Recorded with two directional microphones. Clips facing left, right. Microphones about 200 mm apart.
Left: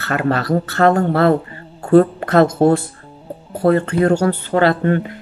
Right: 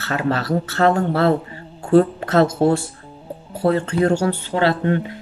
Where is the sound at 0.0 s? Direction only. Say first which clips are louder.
Left 3 dB; 55° left (ahead or behind).